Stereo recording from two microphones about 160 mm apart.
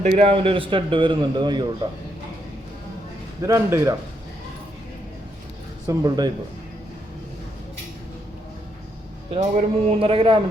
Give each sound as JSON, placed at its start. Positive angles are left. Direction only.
{"t": 0.0, "sound": "a man's voice", "side_deg": -40}
{"t": 3.4, "sound": "speech", "side_deg": -20}
{"t": 5.9, "sound": "speech", "side_deg": -25}
{"t": 9.3, "sound": "a man's voice", "side_deg": -40}